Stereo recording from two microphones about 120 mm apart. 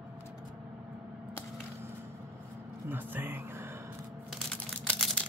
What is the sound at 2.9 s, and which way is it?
Music, 15° right (ahead or behind).